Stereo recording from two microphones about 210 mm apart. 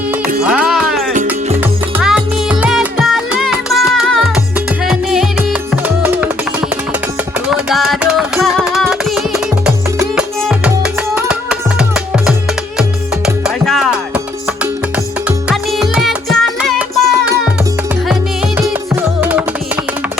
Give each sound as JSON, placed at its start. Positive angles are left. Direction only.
{"t": 0.4, "sound": "music", "side_deg": -5}
{"t": 1.1, "sound": "music", "side_deg": -35}
{"t": 2.0, "sound": "music", "side_deg": -5}
{"t": 7.4, "sound": "a sound", "side_deg": 0}
{"t": 10.2, "sound": "music", "side_deg": -5}
{"t": 15.4, "sound": "music", "side_deg": 0}